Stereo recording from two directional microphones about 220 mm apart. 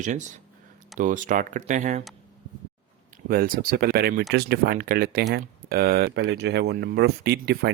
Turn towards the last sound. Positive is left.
turn(degrees=-45)  # may be behind; listen again after turning